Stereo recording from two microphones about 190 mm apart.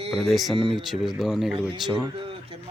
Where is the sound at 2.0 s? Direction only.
30° right (ahead or behind).